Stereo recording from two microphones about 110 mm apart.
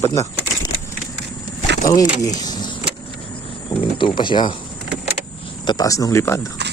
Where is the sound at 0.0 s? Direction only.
30° left (ahead or behind).